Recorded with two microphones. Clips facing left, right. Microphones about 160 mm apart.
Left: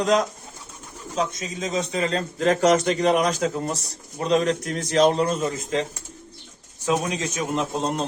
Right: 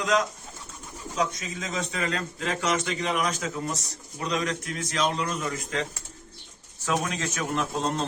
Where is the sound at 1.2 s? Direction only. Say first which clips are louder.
Left 3 dB; 20° left (ahead or behind).